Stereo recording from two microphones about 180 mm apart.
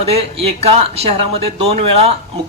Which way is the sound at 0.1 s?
35° right (ahead or behind).